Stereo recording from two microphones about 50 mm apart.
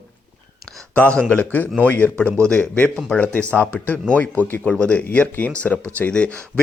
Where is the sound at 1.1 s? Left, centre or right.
Left.